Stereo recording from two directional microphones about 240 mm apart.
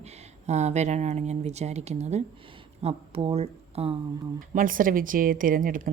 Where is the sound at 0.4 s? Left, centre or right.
Right.